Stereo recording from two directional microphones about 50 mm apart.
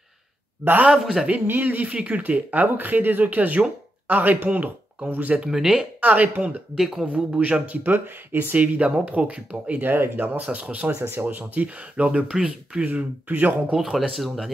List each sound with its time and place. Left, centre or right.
0.9 s speech: centre
1.3 s speech: right
5.4 s speech: centre
5.9 s speech: right
6.8 s speech: centre
7.6 s speech: right
8.7 s speech: right
11.0 s speech: right
12.3 s speech: centre
12.8 s speech: right
13.7 s speech: centre